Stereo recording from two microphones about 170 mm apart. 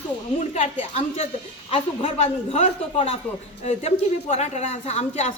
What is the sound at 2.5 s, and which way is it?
A woman's voice, 35° left (ahead or behind).